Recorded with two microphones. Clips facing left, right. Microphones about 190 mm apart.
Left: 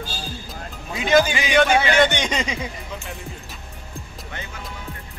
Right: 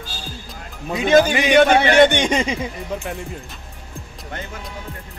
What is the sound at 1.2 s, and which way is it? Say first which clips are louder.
Speech: right 5 dB; 55° right (ahead or behind).